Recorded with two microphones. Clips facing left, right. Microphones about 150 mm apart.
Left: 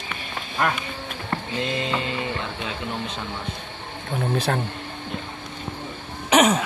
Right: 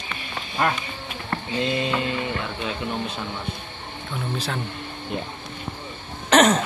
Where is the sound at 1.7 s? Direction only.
20° left (ahead or behind).